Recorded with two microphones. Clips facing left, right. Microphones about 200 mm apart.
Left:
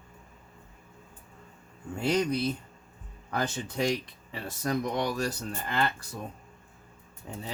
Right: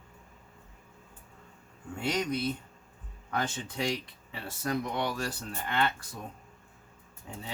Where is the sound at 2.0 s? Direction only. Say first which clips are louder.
Left 4 dB; 35° left (ahead or behind).